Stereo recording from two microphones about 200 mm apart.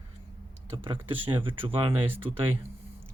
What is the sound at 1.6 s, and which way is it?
Speech, 25° right (ahead or behind).